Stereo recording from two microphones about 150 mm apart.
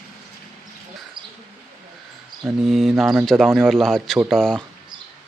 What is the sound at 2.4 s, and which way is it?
Speech, centre (ahead or behind).